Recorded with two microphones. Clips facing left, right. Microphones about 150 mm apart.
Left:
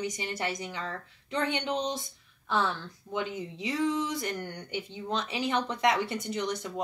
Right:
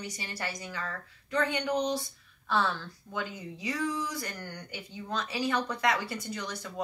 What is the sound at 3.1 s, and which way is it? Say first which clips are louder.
Speech: left 4 dB; 20° left (ahead or behind).